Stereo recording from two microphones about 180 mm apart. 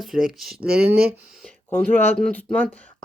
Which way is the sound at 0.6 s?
60° right (ahead or behind).